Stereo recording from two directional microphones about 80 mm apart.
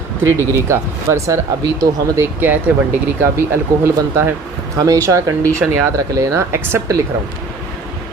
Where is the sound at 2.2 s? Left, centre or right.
Right.